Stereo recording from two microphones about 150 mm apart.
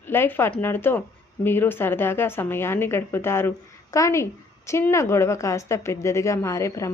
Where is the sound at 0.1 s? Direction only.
15° left (ahead or behind).